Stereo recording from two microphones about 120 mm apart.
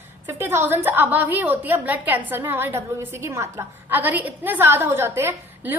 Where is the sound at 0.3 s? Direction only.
20° right (ahead or behind).